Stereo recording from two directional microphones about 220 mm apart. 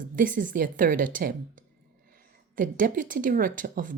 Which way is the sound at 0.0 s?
40° right (ahead or behind).